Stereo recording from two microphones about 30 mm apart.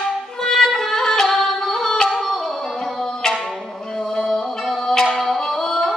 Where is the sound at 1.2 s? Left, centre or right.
Centre.